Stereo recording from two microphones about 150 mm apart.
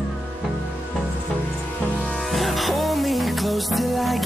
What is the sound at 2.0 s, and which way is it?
Music, centre (ahead or behind).